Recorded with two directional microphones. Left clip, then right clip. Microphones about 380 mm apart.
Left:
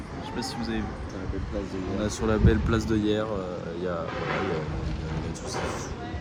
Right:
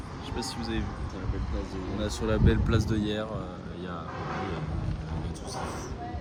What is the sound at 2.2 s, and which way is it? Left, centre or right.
Speech, left.